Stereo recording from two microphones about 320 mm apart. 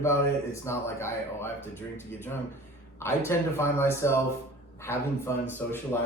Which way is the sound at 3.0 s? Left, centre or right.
Centre.